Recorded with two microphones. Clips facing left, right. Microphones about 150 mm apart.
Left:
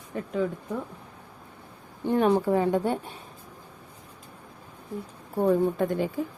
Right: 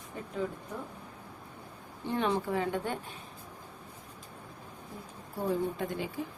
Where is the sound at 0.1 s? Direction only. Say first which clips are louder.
Left 9 dB; 75° left (ahead or behind).